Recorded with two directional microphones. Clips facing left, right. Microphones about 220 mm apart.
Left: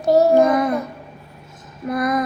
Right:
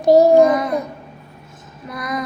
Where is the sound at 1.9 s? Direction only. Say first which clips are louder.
Left 6 dB; 55° left (ahead or behind).